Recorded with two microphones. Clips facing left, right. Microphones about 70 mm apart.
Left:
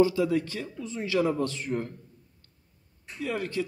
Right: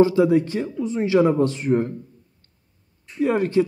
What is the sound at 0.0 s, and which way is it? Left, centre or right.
Speech, right.